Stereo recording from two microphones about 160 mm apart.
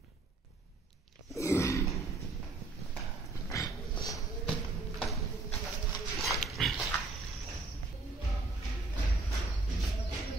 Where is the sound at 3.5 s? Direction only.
20° left (ahead or behind).